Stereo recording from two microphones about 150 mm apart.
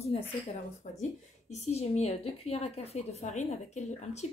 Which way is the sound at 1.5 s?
45° left (ahead or behind).